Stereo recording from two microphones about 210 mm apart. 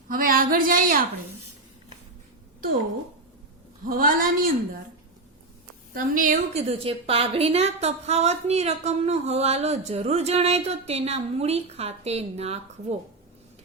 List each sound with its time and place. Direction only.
0.1 s a woman's voice: 45° right (ahead or behind)
3.8 s a woman's voice: 40° right (ahead or behind)
5.9 s a woman's voice: 40° right (ahead or behind)